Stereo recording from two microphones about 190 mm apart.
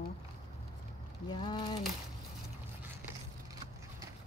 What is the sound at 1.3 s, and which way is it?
Speech, 25° left (ahead or behind).